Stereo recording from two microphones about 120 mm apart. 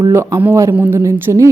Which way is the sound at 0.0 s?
20° right (ahead or behind).